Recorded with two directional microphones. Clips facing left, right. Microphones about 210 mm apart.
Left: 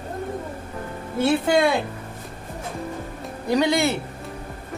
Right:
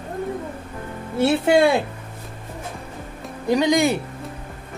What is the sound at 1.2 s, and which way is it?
Speech, 25° right (ahead or behind).